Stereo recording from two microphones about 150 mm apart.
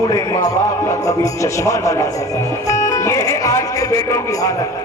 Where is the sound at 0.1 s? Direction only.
20° left (ahead or behind).